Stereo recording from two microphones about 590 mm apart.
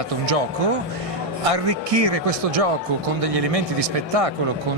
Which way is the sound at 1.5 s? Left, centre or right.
Right.